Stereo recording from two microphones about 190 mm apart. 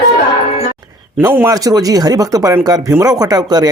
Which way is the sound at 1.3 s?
15° right (ahead or behind).